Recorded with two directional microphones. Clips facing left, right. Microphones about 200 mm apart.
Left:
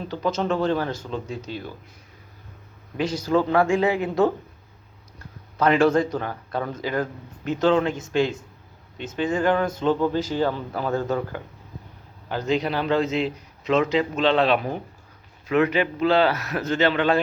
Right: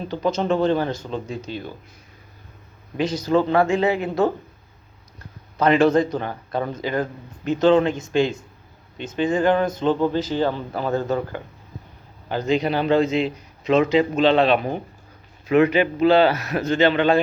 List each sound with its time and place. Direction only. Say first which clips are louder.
0.4 s speech: right 4 dB; 25° right (ahead or behind)
1.3 s a man's voice: right 2 dB; 5° left (ahead or behind)
3.0 s speech: right 2 dB; 10° left (ahead or behind)
3.3 s speech: right 2 dB; 15° right (ahead or behind)
3.7 s speech: right 1 dB; 15° left (ahead or behind)
5.5 s speech: right 2 dB; 10° left (ahead or behind)
6.1 s speech: right 2 dB; 20° right (ahead or behind)
6.7 s a man's voice: right 2 dB; 5° left (ahead or behind)
10.5 s speech: right 2 dB; 15° right (ahead or behind)
12.3 s a man's voice: right 3 dB; centre (ahead or behind)